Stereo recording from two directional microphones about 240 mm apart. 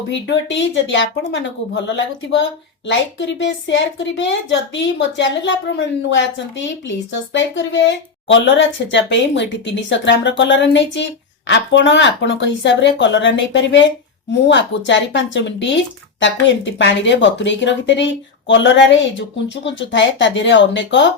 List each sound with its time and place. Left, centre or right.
0.1 s speech: left